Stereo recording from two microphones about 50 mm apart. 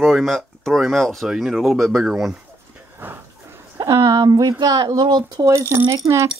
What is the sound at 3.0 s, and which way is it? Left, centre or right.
Speech, right.